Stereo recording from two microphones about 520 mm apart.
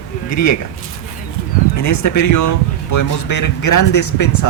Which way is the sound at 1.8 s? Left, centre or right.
Left.